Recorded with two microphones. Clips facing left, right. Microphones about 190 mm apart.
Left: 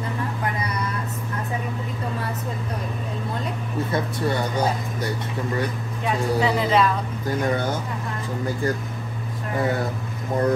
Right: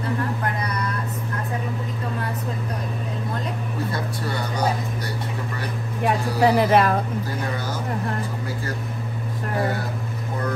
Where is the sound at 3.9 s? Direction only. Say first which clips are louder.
Left 4 dB; 25° left (ahead or behind).